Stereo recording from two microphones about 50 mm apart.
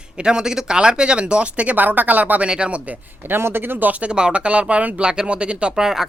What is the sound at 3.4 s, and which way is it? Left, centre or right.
Speech, right.